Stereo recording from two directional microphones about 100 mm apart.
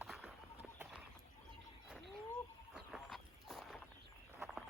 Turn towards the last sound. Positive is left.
turn(degrees=5)  # may be behind; listen again after turning